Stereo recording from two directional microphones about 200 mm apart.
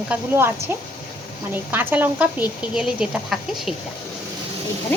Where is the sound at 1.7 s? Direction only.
10° right (ahead or behind).